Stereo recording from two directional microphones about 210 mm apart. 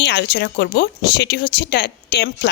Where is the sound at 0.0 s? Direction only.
55° left (ahead or behind).